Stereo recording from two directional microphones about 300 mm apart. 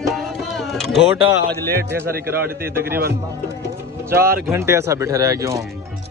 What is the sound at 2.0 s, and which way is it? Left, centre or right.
Speech, right.